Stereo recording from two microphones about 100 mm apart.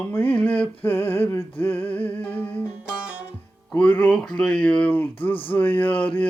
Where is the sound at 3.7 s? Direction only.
10° left (ahead or behind).